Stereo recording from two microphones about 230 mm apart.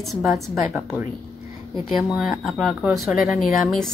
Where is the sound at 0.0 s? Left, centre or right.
Centre.